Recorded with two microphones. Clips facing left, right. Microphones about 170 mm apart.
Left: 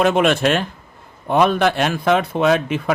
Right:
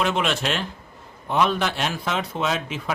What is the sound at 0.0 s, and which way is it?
A man's voice, 50° left (ahead or behind).